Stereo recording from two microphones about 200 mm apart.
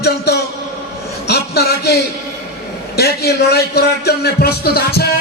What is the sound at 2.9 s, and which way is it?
A man's voice, 55° left (ahead or behind).